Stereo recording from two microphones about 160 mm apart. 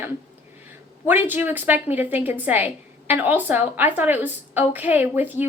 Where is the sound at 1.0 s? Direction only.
10° right (ahead or behind).